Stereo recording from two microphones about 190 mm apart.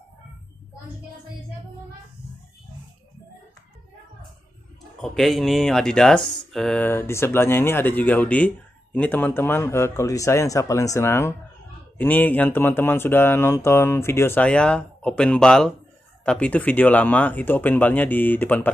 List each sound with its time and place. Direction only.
5.0 s speech: centre (ahead or behind)